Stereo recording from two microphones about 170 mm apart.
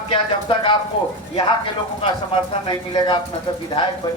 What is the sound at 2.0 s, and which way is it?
Speech, 30° left (ahead or behind).